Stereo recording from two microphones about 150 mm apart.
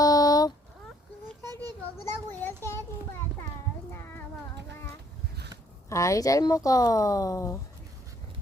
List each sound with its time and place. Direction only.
0.0 s a sound: 25° left (ahead or behind)
2.4 s child singing: 15° left (ahead or behind)
3.9 s child singing: 15° left (ahead or behind)
5.9 s speech: 20° left (ahead or behind)